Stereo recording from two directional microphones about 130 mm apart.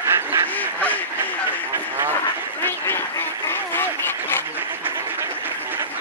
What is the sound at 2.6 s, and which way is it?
Duck, 20° left (ahead or behind).